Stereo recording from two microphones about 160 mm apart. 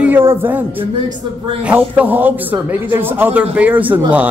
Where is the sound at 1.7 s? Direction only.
10° right (ahead or behind).